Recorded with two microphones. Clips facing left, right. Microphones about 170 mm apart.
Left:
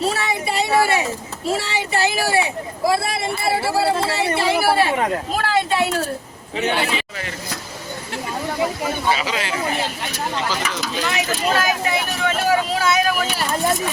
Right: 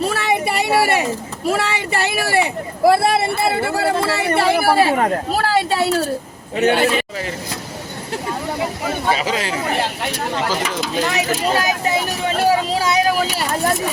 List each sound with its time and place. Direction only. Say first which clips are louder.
0.1 s a sound: right 4 dB; 60° right (ahead or behind)
1.5 s speech: right 2 dB; 60° right (ahead or behind); by 5.9 s 35° right (ahead or behind)
6.6 s a man's voice: right 6 dB; 50° right (ahead or behind)
9.1 s speech: right 3 dB; 40° right (ahead or behind)
10.9 s vehicle: right 4 dB; 40° right (ahead or behind)
13.5 s a sound: left 1 dB; centre (ahead or behind)